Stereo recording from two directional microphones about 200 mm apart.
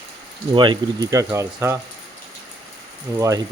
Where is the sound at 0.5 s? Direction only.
25° right (ahead or behind).